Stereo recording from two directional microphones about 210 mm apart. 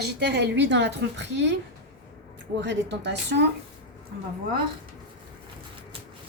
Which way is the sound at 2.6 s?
55° right (ahead or behind).